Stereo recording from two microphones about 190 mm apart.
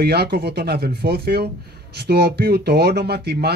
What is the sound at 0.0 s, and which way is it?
Speech, 55° right (ahead or behind).